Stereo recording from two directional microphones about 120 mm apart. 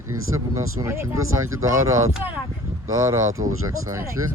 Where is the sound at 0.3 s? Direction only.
25° right (ahead or behind).